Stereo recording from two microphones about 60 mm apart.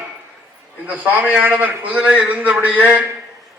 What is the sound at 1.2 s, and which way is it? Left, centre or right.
A man's voice, right.